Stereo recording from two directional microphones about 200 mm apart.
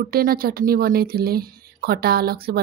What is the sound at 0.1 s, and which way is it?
Speech, 45° right (ahead or behind).